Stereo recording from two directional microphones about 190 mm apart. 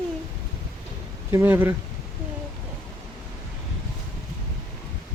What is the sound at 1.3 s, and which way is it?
Speech, 10° right (ahead or behind).